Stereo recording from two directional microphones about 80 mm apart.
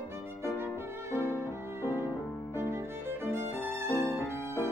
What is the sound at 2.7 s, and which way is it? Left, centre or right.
Violin, right.